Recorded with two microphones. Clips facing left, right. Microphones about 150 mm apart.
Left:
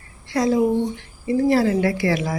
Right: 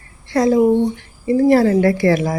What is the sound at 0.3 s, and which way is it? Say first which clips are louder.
Speech: right 5 dB; 50° right (ahead or behind).